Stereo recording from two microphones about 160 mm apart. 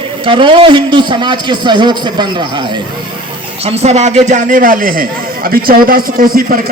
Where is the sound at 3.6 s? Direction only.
40° right (ahead or behind); by 6.6 s 65° right (ahead or behind).